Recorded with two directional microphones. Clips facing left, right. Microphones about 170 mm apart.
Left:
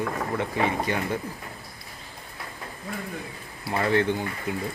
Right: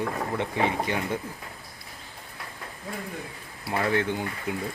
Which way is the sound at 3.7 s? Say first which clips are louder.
Left 1 dB; 5° right (ahead or behind).